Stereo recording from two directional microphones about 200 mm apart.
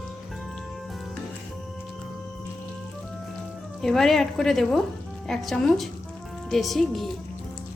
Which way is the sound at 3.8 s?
Centre (ahead or behind).